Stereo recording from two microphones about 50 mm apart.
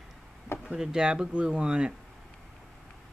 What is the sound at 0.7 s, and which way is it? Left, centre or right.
Speech, centre.